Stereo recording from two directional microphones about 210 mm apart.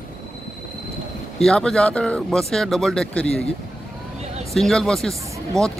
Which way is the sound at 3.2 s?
30° left (ahead or behind).